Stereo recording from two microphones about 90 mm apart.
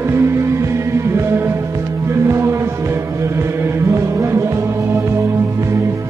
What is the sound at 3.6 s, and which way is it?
Music, 30° right (ahead or behind).